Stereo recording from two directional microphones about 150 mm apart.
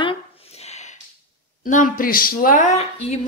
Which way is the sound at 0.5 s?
45° left (ahead or behind).